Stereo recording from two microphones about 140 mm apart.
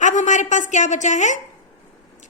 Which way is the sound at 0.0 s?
60° left (ahead or behind).